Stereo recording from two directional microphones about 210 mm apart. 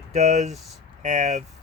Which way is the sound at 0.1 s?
35° right (ahead or behind).